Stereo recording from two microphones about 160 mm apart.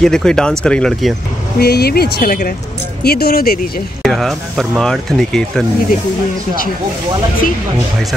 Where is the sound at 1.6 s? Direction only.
80° left; by 2.5 s 65° left (ahead or behind).